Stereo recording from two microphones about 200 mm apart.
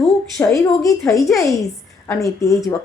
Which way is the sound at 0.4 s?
10° left (ahead or behind).